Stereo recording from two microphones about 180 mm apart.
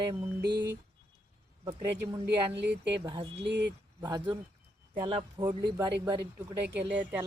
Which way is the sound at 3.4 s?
70° right (ahead or behind).